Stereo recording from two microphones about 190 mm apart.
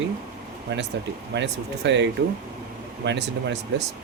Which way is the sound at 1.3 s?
65° right (ahead or behind).